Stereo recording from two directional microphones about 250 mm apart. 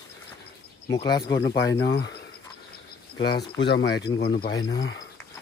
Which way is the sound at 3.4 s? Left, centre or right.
Left.